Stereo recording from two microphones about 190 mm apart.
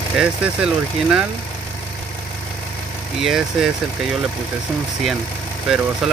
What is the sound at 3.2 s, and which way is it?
Speech, centre (ahead or behind).